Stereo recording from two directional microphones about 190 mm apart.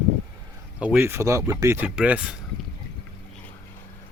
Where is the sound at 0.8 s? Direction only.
10° right (ahead or behind).